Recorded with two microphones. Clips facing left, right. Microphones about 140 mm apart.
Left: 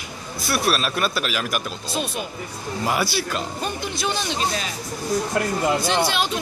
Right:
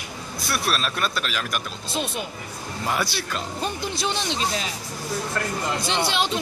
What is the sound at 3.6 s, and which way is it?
Speech, 30° right (ahead or behind).